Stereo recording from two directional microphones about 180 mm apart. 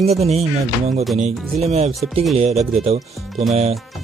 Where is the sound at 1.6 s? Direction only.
35° right (ahead or behind).